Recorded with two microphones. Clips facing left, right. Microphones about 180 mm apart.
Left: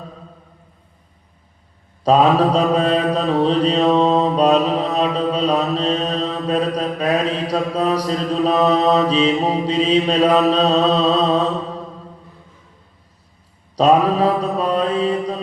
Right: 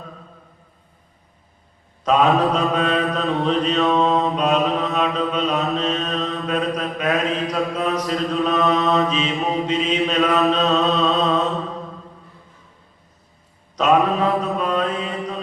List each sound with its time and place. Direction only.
2.0 s mantra: 35° left (ahead or behind)
13.7 s mantra: 35° left (ahead or behind)